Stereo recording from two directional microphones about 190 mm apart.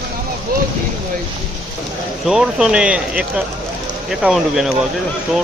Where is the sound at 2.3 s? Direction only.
5° right (ahead or behind).